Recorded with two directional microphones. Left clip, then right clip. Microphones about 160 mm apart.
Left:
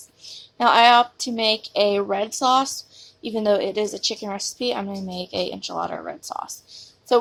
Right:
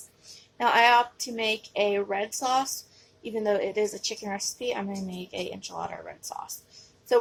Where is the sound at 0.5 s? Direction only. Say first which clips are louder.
Left 6 dB; 45° left (ahead or behind).